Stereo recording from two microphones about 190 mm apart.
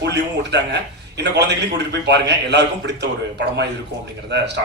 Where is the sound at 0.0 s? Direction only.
65° right (ahead or behind).